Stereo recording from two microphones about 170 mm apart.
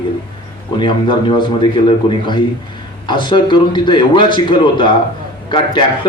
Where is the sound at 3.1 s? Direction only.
25° left (ahead or behind).